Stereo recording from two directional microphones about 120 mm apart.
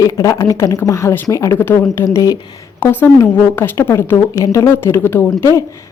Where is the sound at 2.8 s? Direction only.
15° left (ahead or behind).